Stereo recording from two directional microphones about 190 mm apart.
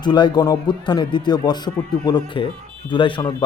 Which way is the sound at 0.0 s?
20° left (ahead or behind).